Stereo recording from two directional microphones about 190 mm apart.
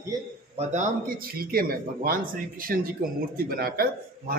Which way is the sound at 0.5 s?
35° right (ahead or behind).